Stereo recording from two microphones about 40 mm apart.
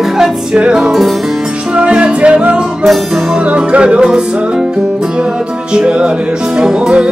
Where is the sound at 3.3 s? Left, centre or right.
Right.